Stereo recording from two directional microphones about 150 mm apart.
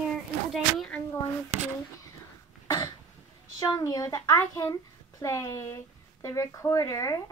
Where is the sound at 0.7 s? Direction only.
5° left (ahead or behind).